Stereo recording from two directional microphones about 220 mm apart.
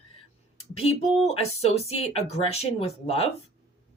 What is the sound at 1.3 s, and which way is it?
Speech, 30° left (ahead or behind).